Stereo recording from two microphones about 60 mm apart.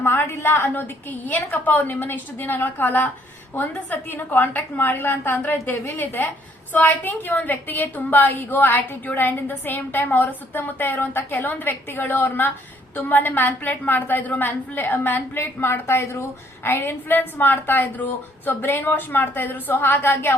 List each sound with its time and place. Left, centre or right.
0.0 s a woman's voice: left